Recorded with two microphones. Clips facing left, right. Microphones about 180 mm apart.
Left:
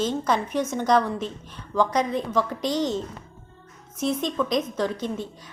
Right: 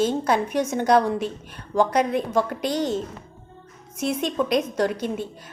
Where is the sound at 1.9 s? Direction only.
65° right (ahead or behind).